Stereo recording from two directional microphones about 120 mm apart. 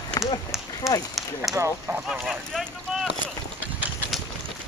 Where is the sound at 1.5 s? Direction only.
Centre (ahead or behind).